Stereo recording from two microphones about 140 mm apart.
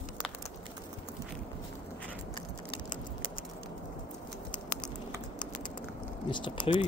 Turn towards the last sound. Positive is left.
turn(degrees=35)  # may be behind; listen again after turning